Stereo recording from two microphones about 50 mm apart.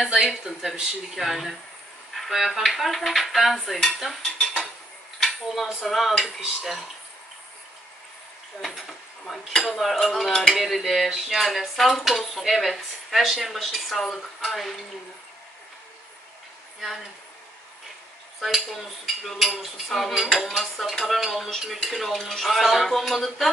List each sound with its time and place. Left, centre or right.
0.6 s speech: centre
1.1 s cutlery: centre
2.1 s dishes: centre
5.5 s cutlery: centre
8.5 s cutlery: centre
18.4 s cutlery: centre